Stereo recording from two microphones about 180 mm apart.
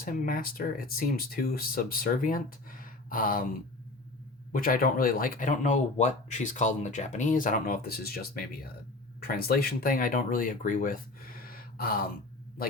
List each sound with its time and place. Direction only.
0.0 s speech: 50° left (ahead or behind)
4.5 s speech: 50° left (ahead or behind)